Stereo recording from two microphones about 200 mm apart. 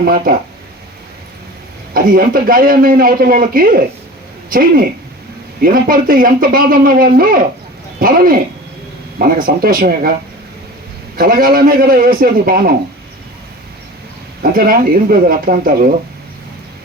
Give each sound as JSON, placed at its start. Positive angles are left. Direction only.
{"t": 0.0, "sound": "a man's voice", "side_deg": -45}
{"t": 1.9, "sound": "a man's voice", "side_deg": -45}
{"t": 11.2, "sound": "a man's voice", "side_deg": -45}
{"t": 14.5, "sound": "a man's voice", "side_deg": -45}